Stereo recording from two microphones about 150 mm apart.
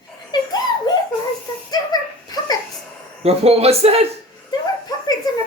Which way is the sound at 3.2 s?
45° right (ahead or behind).